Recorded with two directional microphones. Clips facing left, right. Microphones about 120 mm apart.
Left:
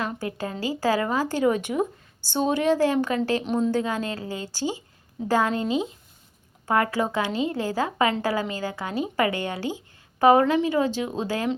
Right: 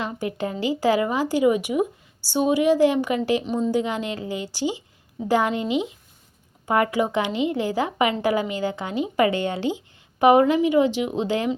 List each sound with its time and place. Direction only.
0.0 s speech: 20° right (ahead or behind)
3.4 s speech: centre (ahead or behind)
3.7 s speech: 20° right (ahead or behind)